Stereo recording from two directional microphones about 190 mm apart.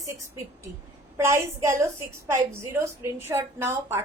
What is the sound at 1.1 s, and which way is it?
A woman's voice, 15° right (ahead or behind).